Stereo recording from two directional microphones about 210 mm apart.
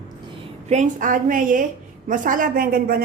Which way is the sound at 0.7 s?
35° right (ahead or behind).